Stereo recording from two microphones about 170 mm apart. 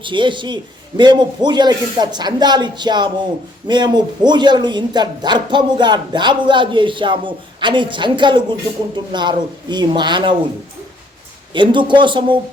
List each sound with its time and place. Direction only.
0.0 s speech: 30° right (ahead or behind)
11.5 s speech: 30° right (ahead or behind)